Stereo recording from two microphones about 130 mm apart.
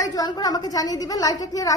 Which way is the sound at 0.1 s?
30° left (ahead or behind).